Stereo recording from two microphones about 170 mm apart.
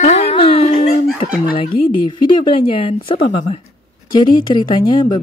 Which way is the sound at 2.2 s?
30° left (ahead or behind).